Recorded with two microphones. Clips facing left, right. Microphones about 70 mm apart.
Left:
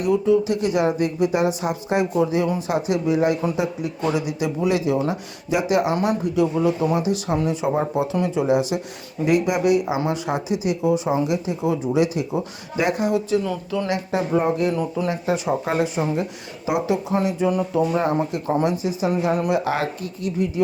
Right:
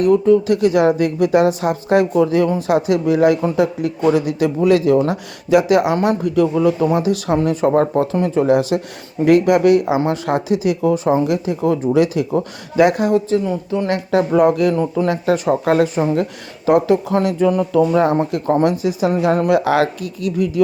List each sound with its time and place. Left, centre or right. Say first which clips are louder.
0.0 s speech: right 6 dB; right
7.3 s speech: right 8 dB; right
12.1 s speech: right 6 dB; right
13.1 s speech: right 5 dB; right
13.8 s speech: right 8 dB; right
14.3 s speech: right 6 dB; right
18.2 s speech: right 5 dB; right